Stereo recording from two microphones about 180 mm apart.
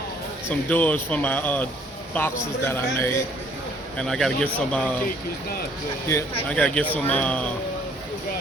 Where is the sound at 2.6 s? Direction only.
10° left (ahead or behind).